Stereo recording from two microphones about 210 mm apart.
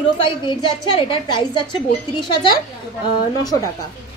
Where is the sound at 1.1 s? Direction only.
20° left (ahead or behind).